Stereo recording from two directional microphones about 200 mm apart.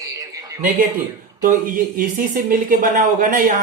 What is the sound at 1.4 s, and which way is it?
Speech, 45° right (ahead or behind).